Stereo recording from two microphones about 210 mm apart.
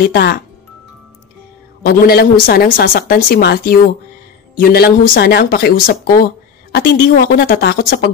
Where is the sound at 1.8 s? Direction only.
45° left (ahead or behind).